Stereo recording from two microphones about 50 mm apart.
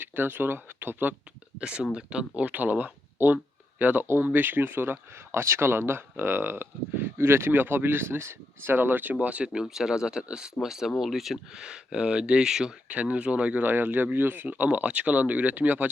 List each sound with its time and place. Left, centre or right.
0.0 s speech: right
1.5 s speech: centre; by 4.9 s right
5.3 s speech: right
9.1 s speech: right
9.5 s speech: centre
11.6 s speech: centre
12.9 s speech: right
13.6 s speech: right